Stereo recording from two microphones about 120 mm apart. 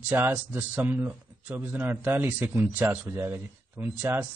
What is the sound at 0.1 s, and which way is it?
A man's voice, 20° right (ahead or behind).